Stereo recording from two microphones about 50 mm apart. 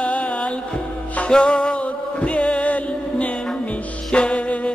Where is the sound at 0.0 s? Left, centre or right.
Left.